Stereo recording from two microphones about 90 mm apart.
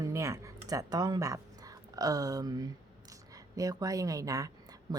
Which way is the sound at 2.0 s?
40° right (ahead or behind).